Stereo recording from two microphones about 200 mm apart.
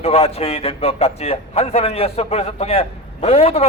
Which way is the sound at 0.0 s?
30° left (ahead or behind).